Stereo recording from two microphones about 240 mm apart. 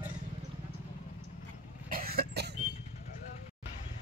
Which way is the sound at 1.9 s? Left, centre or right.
Right.